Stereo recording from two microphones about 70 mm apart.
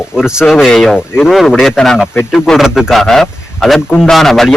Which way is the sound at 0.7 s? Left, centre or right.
Centre.